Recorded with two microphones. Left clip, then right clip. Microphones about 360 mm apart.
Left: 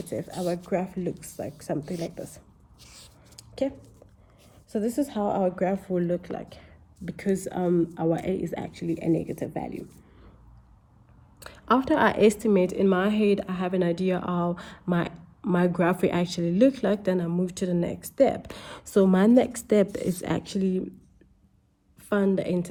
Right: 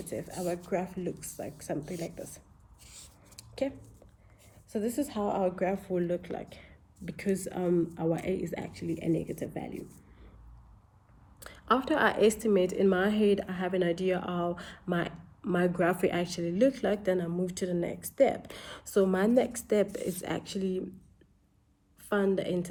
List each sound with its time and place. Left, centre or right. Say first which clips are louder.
0.1 s speech: left 5 dB; left
3.3 s a sound: left 5 dB; left
4.7 s speech: left 5 dB; left
11.3 s speech: left 4 dB; left
13.7 s speech: left 3 dB; left
14.3 s speech: left 4 dB; left
22.1 s speech: left 3 dB; left